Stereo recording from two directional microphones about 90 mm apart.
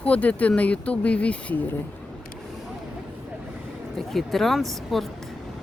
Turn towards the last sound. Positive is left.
turn(degrees=0)  # may be behind; listen again after turning